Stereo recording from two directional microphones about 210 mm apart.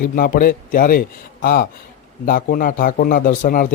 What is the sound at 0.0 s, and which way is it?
A man's voice, 45° left (ahead or behind).